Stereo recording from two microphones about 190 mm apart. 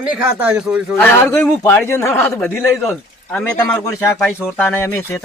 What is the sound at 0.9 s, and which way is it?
A man's voice, 10° left (ahead or behind).